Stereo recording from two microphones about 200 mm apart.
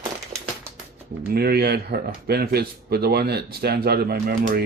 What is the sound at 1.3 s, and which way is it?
Speech, 50° right (ahead or behind).